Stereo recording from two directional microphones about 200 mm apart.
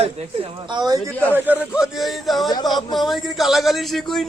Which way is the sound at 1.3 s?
10° right (ahead or behind).